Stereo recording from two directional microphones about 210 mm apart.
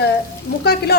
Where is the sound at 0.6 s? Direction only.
50° left (ahead or behind).